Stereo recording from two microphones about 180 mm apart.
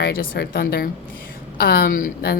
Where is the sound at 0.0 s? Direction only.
60° left (ahead or behind).